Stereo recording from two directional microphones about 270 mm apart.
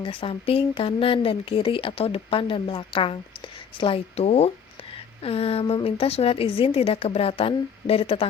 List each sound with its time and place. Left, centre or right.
0.0 s speech: centre